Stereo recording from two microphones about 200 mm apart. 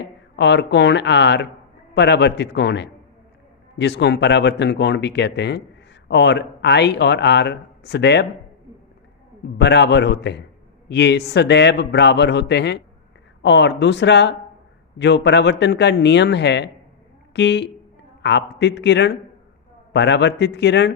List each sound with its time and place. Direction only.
0.0 s speech: 60° left (ahead or behind)
9.6 s speech: 60° left (ahead or behind)